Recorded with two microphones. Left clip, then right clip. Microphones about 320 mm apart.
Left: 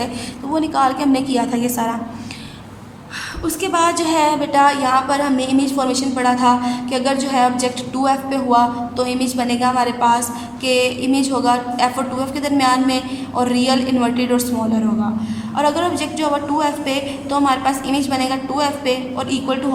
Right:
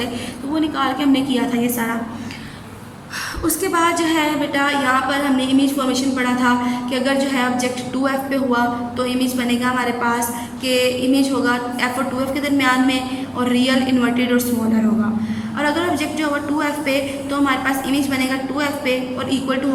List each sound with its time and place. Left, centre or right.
0.5 s a woman's voice: centre
3.4 s a woman's voice: centre
15.5 s a woman's voice: centre